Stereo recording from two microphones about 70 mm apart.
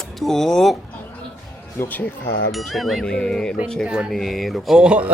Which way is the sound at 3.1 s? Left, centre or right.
Centre.